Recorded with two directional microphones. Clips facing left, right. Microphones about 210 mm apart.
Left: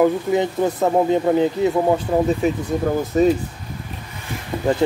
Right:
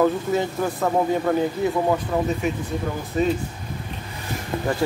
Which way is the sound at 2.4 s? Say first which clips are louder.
Left 6 dB; 35° left (ahead or behind).